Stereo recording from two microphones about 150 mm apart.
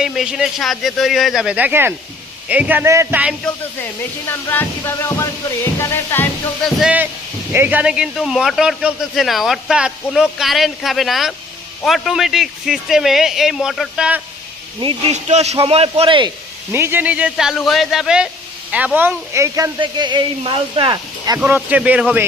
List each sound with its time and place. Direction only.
0.0 s speech: 5° right (ahead or behind)
4.3 s speech: 15° left (ahead or behind)
6.7 s speech: 5° right (ahead or behind)
14.8 s speech: 35° right (ahead or behind)
15.1 s speech: 50° right (ahead or behind); by 16.3 s 35° right (ahead or behind)
16.7 s speech: 15° right (ahead or behind)
18.9 s speech: 15° right (ahead or behind)
19.8 s speech: 30° right (ahead or behind)
21.3 s speech: 10° right (ahead or behind)